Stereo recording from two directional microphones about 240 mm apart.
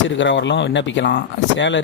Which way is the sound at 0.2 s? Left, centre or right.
Left.